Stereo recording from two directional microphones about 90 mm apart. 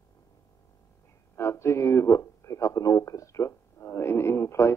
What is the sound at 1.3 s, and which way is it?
A man's voice, 30° left (ahead or behind).